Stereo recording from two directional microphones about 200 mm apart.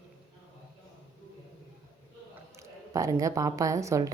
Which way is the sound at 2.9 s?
15° right (ahead or behind).